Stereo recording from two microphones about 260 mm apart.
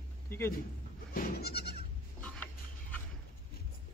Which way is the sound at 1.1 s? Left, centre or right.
Left.